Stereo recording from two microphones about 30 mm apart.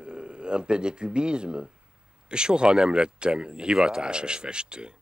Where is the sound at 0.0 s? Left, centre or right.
Right.